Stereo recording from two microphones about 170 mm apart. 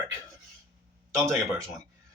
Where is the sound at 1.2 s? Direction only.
15° right (ahead or behind).